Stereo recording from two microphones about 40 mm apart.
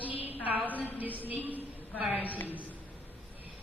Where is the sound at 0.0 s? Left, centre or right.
Right.